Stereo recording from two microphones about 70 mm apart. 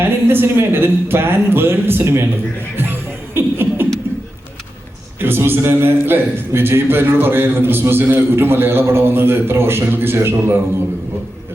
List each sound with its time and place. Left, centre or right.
0.0 s a man's voice: right
2.7 s music: right
5.2 s a man's voice: right